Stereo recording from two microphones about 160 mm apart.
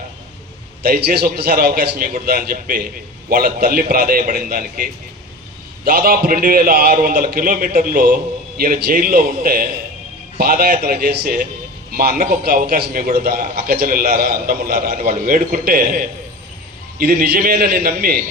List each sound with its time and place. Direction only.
0.8 s a man's voice: 70° right (ahead or behind)